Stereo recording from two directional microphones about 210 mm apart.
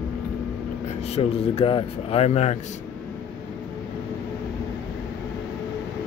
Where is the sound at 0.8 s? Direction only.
30° left (ahead or behind).